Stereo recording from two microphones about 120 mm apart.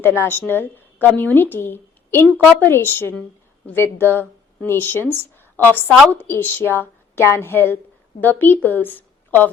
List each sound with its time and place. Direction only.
0.0 s a woman's voice: 20° left (ahead or behind)
6.1 s a woman's voice: 15° left (ahead or behind)